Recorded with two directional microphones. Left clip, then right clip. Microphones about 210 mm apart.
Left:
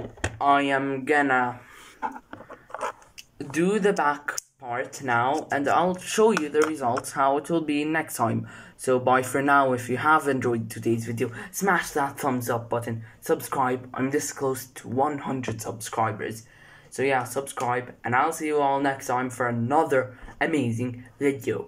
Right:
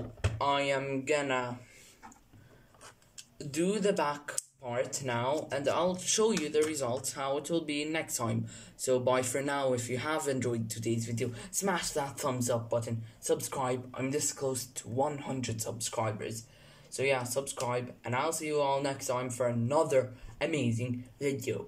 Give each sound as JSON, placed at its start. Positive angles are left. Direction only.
{"t": 0.6, "sound": "speech", "side_deg": -10}
{"t": 3.5, "sound": "speech", "side_deg": -10}